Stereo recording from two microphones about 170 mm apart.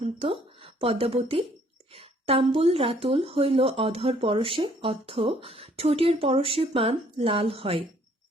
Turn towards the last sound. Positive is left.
turn(degrees=-35)  # may be behind; listen again after turning